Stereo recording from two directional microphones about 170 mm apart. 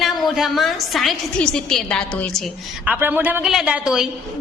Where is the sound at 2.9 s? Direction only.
10° right (ahead or behind).